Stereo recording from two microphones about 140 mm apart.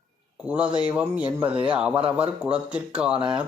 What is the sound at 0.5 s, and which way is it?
Speech, 10° right (ahead or behind).